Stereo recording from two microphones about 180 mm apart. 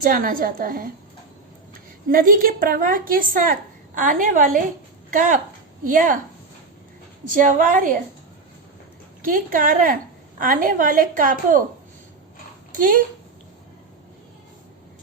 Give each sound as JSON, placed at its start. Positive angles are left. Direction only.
{"t": 0.0, "sound": "a woman's voice", "side_deg": -50}
{"t": 2.0, "sound": "a woman's voice", "side_deg": -50}
{"t": 5.8, "sound": "a woman's voice", "side_deg": -45}
{"t": 7.3, "sound": "a woman's voice", "side_deg": -50}
{"t": 9.2, "sound": "a woman's voice", "side_deg": -50}
{"t": 12.7, "sound": "speech", "side_deg": -50}